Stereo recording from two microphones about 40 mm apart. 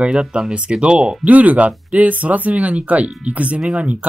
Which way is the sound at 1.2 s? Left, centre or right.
Right.